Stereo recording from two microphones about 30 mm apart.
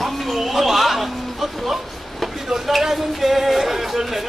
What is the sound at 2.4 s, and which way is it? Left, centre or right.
Speech, centre.